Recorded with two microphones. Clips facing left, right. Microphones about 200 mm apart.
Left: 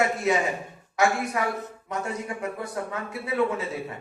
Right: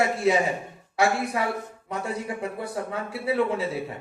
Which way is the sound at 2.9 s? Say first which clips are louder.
Right 5 dB; 30° right (ahead or behind).